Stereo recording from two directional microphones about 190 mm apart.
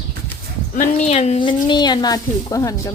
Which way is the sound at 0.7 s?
40° left (ahead or behind).